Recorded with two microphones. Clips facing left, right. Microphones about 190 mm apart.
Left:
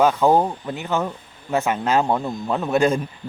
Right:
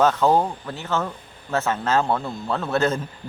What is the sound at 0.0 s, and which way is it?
Speech, 15° left (ahead or behind).